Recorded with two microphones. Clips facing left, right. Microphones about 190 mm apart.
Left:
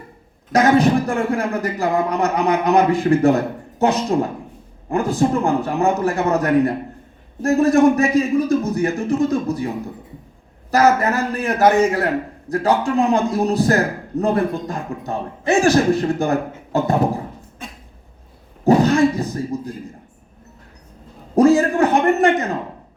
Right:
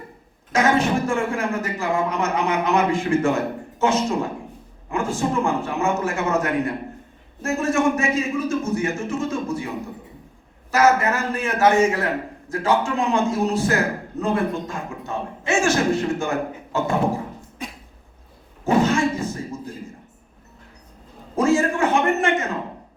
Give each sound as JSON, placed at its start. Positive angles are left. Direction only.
{"t": 0.5, "sound": "a man's voice", "side_deg": 35}
{"t": 10.7, "sound": "a man's voice", "side_deg": 35}
{"t": 18.6, "sound": "a sound", "side_deg": 35}
{"t": 21.3, "sound": "a man's voice", "side_deg": 35}